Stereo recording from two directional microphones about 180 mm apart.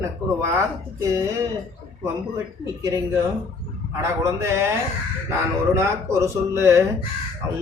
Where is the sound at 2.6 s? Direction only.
20° right (ahead or behind).